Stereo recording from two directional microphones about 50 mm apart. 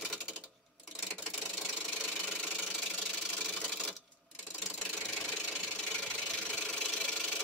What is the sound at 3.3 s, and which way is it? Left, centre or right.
Engine, left.